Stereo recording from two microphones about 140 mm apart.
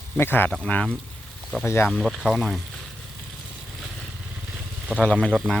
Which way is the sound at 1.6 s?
20° left (ahead or behind).